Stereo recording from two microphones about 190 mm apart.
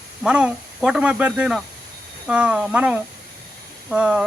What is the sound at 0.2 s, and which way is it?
A man's voice, 5° right (ahead or behind).